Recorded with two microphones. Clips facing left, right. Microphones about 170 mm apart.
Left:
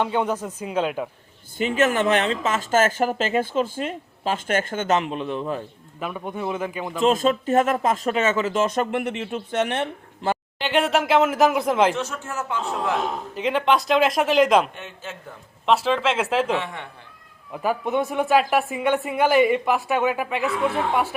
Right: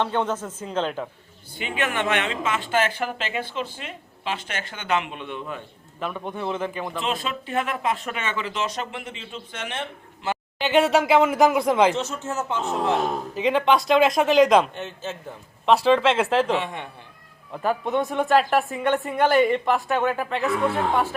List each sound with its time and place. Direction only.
0.0 s speech: 10° left (ahead or behind)
1.5 s speech: 40° left (ahead or behind)
6.0 s speech: 10° left (ahead or behind)
7.0 s speech: 45° left (ahead or behind); by 9.9 s 60° left (ahead or behind)
10.6 s speech: centre (ahead or behind)
11.9 s a man's voice: 20° right (ahead or behind)
13.3 s speech: centre (ahead or behind)
14.8 s a man's voice: 30° right (ahead or behind)
15.6 s speech: centre (ahead or behind)
16.5 s speech: 20° right (ahead or behind)
17.5 s speech: 5° left (ahead or behind)